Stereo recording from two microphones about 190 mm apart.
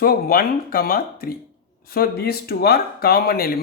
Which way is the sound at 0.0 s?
50° left (ahead or behind).